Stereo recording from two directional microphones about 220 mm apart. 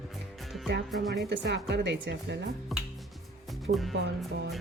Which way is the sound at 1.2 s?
50° right (ahead or behind).